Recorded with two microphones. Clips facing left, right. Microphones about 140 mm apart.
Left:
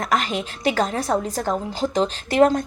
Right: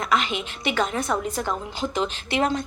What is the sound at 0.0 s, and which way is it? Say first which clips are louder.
A woman's voice: left 2 dB; 40° left (ahead or behind).